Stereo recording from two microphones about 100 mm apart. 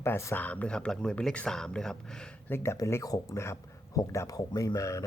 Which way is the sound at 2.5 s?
25° left (ahead or behind).